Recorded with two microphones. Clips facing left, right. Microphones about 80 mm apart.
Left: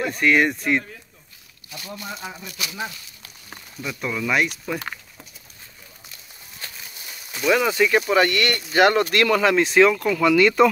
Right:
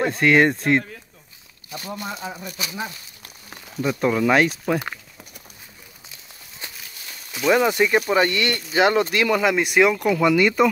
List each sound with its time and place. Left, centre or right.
0.2 s speech: right
2.0 s speech: right
6.6 s a sound: centre
7.5 s speech: centre